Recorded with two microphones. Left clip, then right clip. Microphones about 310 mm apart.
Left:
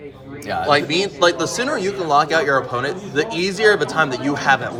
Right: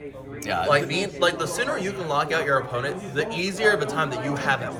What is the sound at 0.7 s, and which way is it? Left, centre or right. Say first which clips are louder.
Speech: left 6 dB; left.